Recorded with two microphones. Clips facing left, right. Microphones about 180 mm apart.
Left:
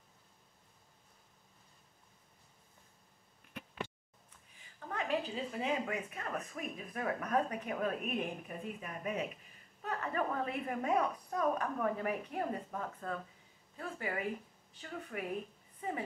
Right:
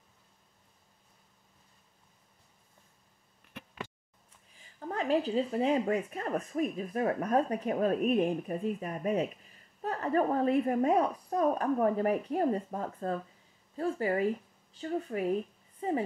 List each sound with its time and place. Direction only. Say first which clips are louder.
4.7 s speech: right 7 dB; 35° right (ahead or behind)